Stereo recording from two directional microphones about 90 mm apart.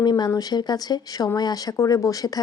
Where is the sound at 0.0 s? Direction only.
50° left (ahead or behind).